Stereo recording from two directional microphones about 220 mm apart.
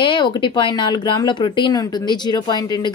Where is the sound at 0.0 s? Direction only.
20° left (ahead or behind).